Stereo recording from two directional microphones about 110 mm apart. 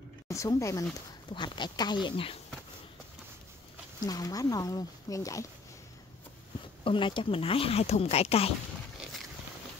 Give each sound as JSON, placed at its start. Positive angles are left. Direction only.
{"t": 0.3, "sound": "speech", "side_deg": 30}
{"t": 1.3, "sound": "speech", "side_deg": 45}
{"t": 4.0, "sound": "speech", "side_deg": 35}
{"t": 6.8, "sound": "speech", "side_deg": 50}